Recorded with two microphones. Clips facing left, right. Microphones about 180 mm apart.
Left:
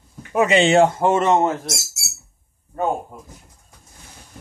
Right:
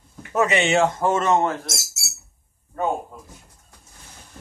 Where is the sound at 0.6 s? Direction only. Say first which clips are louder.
Left 5 dB; 30° left (ahead or behind).